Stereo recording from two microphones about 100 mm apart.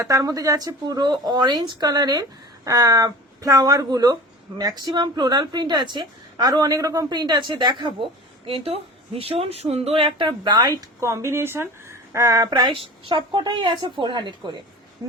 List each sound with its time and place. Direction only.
0.0 s speech: 35° right (ahead or behind)
11.0 s speech: 30° right (ahead or behind)
12.5 s speech: 50° right (ahead or behind)